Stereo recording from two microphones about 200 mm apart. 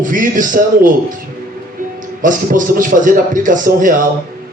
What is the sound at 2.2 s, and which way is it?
Speech, 40° right (ahead or behind).